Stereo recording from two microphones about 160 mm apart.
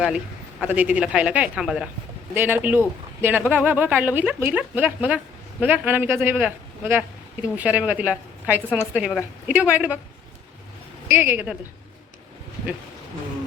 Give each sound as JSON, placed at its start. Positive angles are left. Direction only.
{"t": 0.6, "sound": "a woman's voice", "side_deg": -10}
{"t": 11.1, "sound": "a woman's voice", "side_deg": -15}